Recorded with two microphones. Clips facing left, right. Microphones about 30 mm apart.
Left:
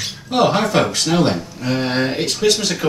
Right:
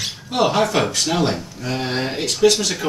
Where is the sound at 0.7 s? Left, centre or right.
Left.